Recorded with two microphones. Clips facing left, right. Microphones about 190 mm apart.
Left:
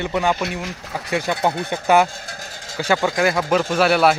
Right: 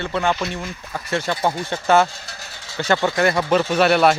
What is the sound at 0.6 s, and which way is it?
Speech, 80° left.